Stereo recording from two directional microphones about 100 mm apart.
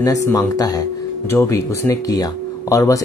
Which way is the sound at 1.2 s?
25° left (ahead or behind).